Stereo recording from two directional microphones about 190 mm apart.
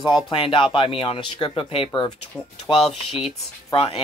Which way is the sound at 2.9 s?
Centre (ahead or behind).